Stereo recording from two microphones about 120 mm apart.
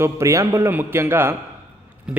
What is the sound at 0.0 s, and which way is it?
A man's voice, 25° right (ahead or behind).